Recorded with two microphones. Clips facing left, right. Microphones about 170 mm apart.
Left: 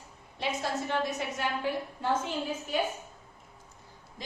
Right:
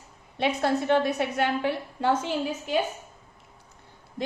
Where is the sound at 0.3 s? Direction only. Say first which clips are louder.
Right 7 dB; 65° right (ahead or behind); by 2.7 s 80° right.